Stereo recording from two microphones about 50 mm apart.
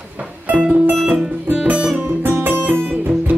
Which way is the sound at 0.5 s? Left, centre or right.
Right.